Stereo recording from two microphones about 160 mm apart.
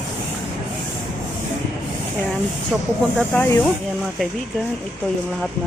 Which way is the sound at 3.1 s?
10° left (ahead or behind).